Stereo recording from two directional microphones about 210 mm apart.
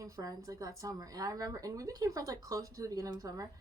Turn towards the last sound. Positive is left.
turn(degrees=-15)  # may be behind; listen again after turning